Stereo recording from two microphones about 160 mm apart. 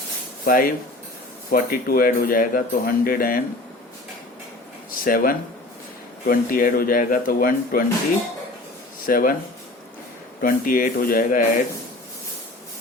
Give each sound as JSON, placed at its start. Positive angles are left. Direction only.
{"t": 0.4, "sound": "speech", "side_deg": 60}
{"t": 5.0, "sound": "speech", "side_deg": 65}
{"t": 9.0, "sound": "speech", "side_deg": 60}
{"t": 10.4, "sound": "speech", "side_deg": 60}